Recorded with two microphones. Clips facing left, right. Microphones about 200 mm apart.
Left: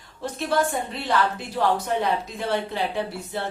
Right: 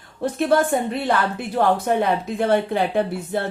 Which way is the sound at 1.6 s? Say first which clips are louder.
Right 4 dB; 55° right (ahead or behind).